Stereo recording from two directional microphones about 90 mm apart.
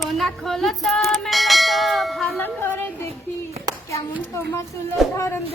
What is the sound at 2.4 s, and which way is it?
Speech, 25° left (ahead or behind).